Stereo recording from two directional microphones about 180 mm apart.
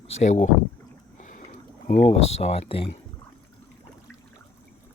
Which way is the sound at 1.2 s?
45° left (ahead or behind).